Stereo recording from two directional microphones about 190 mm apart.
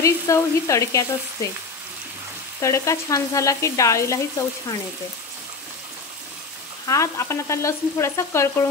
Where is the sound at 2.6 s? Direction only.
15° left (ahead or behind).